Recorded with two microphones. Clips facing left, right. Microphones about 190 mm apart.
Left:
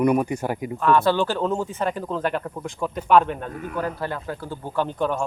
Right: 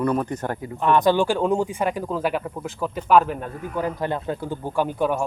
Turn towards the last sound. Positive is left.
turn(degrees=-10)  # may be behind; listen again after turning